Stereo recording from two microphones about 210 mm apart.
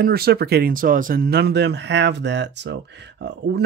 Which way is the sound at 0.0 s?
45° right (ahead or behind).